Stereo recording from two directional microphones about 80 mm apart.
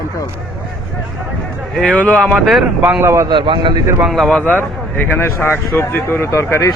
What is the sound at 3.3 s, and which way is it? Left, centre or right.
Speech, right.